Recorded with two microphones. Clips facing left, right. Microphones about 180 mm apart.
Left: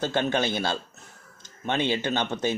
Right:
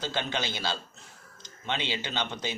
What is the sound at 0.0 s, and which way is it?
Speech, 50° left (ahead or behind).